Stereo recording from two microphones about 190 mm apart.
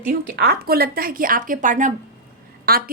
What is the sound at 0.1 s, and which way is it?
A woman's voice, 55° right (ahead or behind).